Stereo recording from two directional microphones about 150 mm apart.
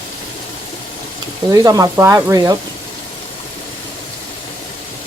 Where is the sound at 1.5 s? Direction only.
25° right (ahead or behind).